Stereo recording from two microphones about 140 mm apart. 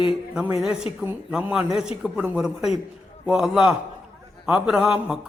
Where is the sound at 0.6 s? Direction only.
5° right (ahead or behind).